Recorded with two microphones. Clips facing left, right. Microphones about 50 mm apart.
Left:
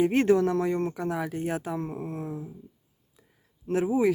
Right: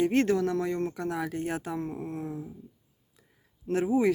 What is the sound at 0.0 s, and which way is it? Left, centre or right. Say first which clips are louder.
Speech: left 3 dB; centre.